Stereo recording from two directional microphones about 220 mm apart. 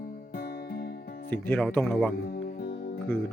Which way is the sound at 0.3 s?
45° left (ahead or behind).